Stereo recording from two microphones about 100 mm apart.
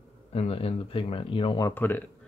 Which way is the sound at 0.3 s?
80° left.